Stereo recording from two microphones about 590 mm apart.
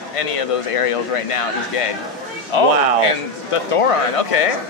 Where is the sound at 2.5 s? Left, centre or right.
Left.